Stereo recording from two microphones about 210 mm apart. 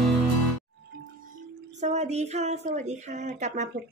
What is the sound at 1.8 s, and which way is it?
Speech, 35° right (ahead or behind).